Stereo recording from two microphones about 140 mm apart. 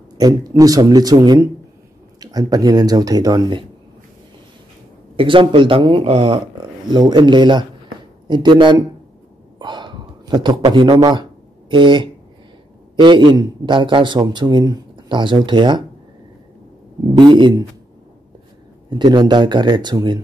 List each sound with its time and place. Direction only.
0.2 s speech: 25° right (ahead or behind)
5.1 s a man's voice: 35° right (ahead or behind)
17.1 s a man's voice: 35° right (ahead or behind)
18.9 s a man's voice: 30° right (ahead or behind)